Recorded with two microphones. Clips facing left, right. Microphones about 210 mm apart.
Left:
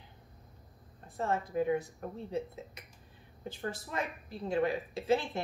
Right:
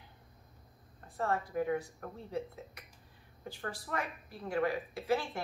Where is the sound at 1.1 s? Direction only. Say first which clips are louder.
Left 1 dB; 20° left (ahead or behind).